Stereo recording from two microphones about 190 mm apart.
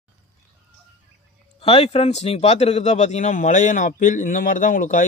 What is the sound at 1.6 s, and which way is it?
Speech, 30° left (ahead or behind).